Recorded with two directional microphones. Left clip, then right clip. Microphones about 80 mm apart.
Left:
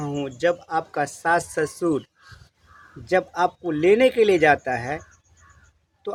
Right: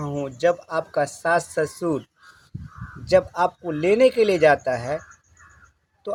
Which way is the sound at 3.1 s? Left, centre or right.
Left.